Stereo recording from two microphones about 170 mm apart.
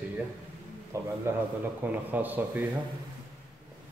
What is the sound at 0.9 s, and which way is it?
Speech, 15° right (ahead or behind).